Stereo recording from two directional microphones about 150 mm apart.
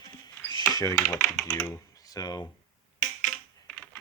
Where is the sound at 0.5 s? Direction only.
25° left (ahead or behind).